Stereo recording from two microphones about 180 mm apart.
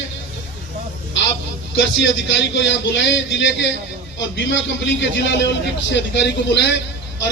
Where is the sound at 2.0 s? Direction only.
90° left.